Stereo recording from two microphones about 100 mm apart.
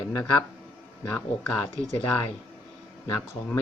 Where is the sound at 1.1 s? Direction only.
15° left (ahead or behind).